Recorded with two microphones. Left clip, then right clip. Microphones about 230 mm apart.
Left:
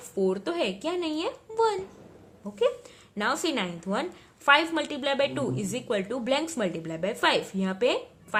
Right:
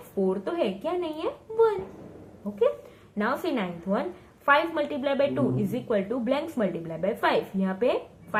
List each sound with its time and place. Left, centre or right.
0.3 s a woman's voice: left
3.2 s a woman's voice: left